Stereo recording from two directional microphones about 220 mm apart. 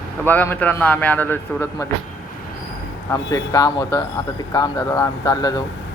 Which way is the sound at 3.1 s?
15° left (ahead or behind).